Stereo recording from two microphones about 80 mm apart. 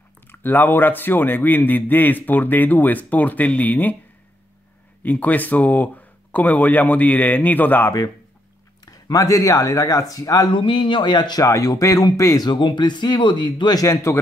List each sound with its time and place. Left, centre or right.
0.3 s a man's voice: left
5.0 s a man's voice: left
8.8 s speech: left
10.5 s speech: left
11.3 s speech: left
12.4 s speech: left
13.7 s speech: left